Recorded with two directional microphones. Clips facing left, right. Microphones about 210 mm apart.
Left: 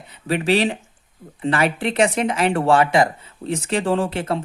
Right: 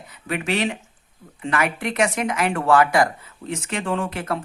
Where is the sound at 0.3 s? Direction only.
30° left (ahead or behind).